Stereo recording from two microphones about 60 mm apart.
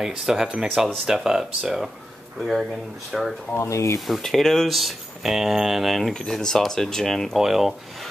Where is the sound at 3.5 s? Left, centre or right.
Left.